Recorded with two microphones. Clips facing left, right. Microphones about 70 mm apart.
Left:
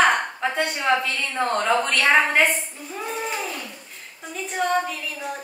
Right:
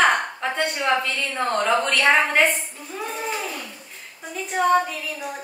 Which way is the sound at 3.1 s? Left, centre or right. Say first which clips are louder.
Even; centre.